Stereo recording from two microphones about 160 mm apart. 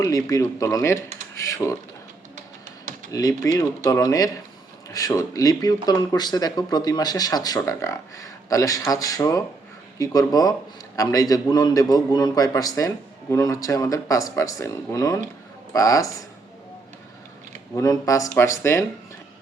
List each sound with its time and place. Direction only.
0.0 s speech: 20° left (ahead or behind)
3.1 s speech: 20° left (ahead or behind)
17.7 s speech: 20° left (ahead or behind)